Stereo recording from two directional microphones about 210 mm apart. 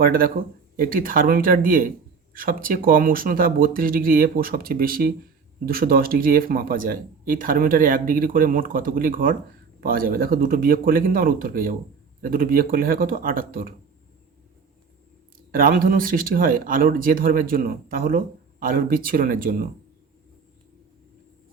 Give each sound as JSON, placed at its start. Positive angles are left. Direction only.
{"t": 0.0, "sound": "speech", "side_deg": -45}
{"t": 15.5, "sound": "speech", "side_deg": -40}